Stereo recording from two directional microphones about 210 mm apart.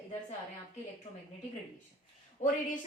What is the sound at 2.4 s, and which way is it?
Speech, 35° left (ahead or behind).